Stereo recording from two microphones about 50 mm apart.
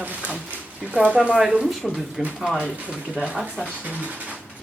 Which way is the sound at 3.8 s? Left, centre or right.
Right.